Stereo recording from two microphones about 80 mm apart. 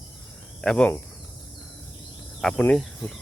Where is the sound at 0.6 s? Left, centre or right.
Centre.